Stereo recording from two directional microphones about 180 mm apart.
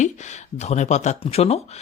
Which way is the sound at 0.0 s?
40° left (ahead or behind).